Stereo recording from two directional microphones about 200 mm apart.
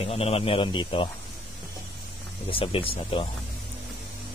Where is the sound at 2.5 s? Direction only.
25° left (ahead or behind).